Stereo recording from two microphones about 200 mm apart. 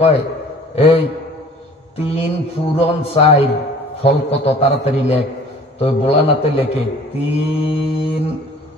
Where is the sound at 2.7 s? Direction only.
30° left (ahead or behind).